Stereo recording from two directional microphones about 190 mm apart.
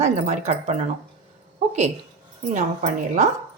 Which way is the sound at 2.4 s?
40° right (ahead or behind).